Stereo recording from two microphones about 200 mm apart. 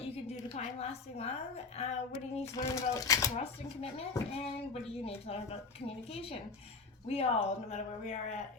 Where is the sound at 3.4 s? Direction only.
30° left (ahead or behind).